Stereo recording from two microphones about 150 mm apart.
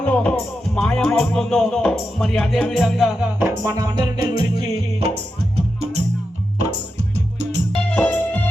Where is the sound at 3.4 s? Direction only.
15° right (ahead or behind).